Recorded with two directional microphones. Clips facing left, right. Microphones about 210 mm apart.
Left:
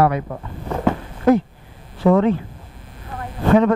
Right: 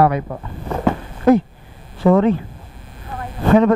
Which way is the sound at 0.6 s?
25° right (ahead or behind).